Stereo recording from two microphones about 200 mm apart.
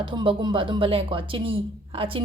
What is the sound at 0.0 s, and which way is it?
A woman's voice, 25° right (ahead or behind).